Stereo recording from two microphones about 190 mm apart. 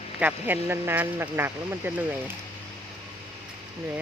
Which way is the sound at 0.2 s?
10° right (ahead or behind).